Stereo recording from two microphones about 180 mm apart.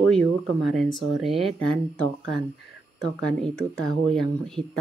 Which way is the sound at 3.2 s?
5° left (ahead or behind).